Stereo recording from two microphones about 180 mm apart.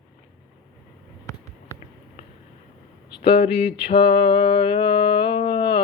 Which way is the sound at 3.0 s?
30° left (ahead or behind).